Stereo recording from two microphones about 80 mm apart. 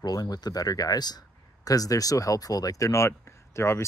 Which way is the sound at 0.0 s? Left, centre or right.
Left.